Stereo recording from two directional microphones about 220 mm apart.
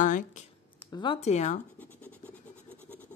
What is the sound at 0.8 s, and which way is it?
Speech, 20° left (ahead or behind).